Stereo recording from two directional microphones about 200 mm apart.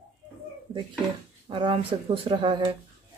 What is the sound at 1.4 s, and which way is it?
Speech, 25° right (ahead or behind).